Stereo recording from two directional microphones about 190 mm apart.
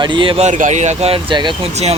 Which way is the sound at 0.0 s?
25° right (ahead or behind).